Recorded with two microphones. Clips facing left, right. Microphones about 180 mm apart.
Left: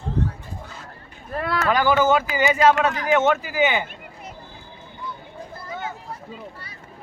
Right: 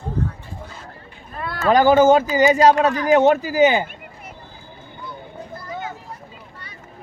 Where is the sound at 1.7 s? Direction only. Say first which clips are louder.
Right 7 dB; 45° right (ahead or behind).